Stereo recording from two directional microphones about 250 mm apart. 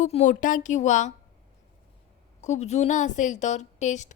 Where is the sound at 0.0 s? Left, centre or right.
Left.